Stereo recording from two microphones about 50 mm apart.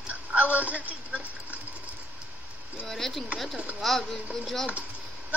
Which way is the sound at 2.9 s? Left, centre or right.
Centre.